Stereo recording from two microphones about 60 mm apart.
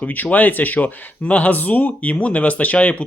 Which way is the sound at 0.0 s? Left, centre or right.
Left.